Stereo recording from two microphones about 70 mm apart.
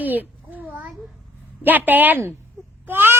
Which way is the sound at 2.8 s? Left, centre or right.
Right.